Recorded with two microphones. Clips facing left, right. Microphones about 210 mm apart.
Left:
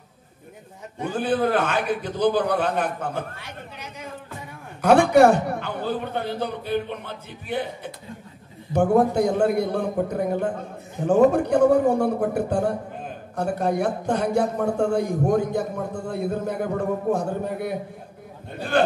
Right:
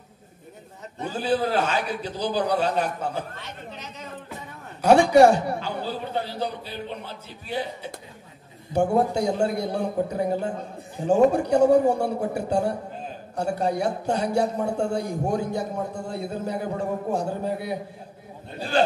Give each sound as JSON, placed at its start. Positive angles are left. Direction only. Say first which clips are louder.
{"t": 1.0, "sound": "a man's voice", "louder": "left 2 dB", "side_deg": 55}
{"t": 3.3, "sound": "a sound", "louder": "right 1 dB", "side_deg": 10}
{"t": 4.8, "sound": "a man's voice", "louder": "even", "side_deg": 55}